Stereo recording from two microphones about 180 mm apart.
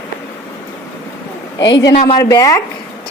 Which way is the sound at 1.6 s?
80° left.